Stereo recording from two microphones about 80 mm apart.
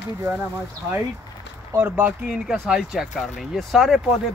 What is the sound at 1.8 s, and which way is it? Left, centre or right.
Speech, right.